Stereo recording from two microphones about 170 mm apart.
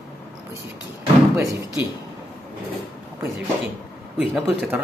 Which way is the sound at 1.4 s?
20° right (ahead or behind).